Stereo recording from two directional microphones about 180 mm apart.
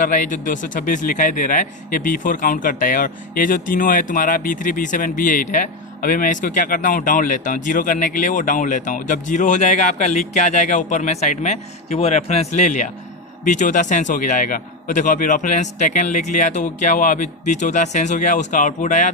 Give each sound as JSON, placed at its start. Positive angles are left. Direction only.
{"t": 0.0, "sound": "speech", "side_deg": 45}